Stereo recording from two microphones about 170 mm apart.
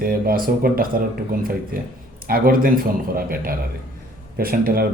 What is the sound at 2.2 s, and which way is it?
Speech, 60° right (ahead or behind).